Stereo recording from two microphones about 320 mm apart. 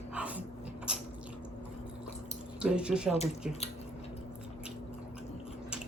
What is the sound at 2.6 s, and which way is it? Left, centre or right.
Speech, centre.